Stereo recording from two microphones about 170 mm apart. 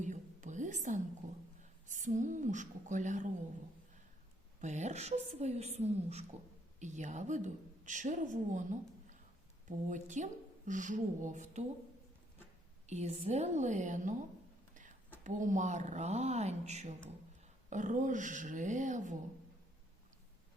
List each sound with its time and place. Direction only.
0.0 s whispering: 45° right (ahead or behind)
1.9 s speech: 45° right (ahead or behind)
4.6 s a woman's voice: 45° right (ahead or behind)
12.9 s speech: 40° right (ahead or behind)
15.2 s speech: 50° right (ahead or behind)